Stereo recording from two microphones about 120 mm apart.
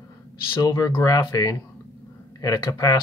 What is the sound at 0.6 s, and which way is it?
Speech, 30° left (ahead or behind).